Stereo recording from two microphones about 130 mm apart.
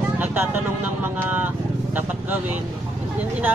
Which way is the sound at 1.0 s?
15° right (ahead or behind).